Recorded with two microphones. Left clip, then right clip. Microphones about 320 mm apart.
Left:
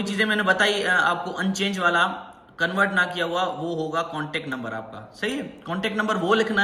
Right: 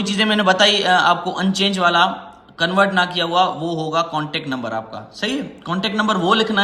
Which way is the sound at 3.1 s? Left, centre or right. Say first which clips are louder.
Right 8 dB; right.